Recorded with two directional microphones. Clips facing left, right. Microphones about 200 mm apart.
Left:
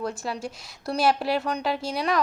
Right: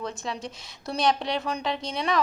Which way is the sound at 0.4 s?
5° left (ahead or behind).